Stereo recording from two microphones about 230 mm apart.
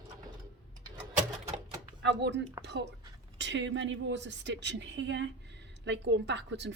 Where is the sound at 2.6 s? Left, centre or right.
Right.